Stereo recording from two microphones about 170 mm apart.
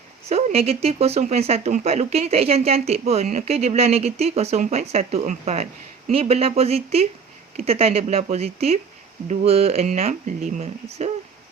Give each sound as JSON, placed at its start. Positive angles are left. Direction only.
{"t": 0.3, "sound": "speech", "side_deg": -35}